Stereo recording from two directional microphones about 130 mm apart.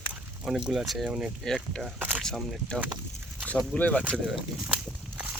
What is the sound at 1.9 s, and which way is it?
Speech, 15° right (ahead or behind).